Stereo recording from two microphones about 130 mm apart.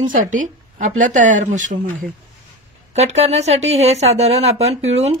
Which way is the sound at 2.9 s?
60° right (ahead or behind).